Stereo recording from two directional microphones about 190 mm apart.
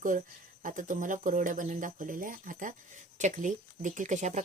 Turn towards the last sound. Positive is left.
turn(degrees=-40)  # may be behind; listen again after turning